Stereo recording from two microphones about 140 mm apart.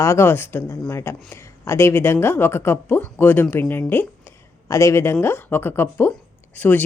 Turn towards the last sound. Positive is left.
turn(degrees=10)  # may be behind; listen again after turning